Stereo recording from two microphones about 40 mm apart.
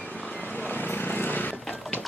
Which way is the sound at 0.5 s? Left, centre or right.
Left.